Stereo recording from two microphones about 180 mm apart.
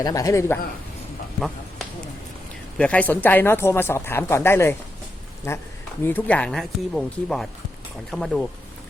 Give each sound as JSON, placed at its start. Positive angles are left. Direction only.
{"t": 0.0, "sound": "speech", "side_deg": 20}
{"t": 1.4, "sound": "a sound", "side_deg": 0}
{"t": 2.7, "sound": "speech", "side_deg": 5}